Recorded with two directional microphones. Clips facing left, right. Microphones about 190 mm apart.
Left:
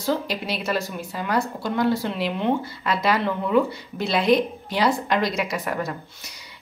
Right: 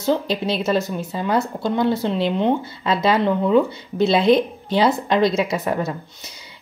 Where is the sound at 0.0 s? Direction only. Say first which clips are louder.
Right 5 dB; 25° right (ahead or behind).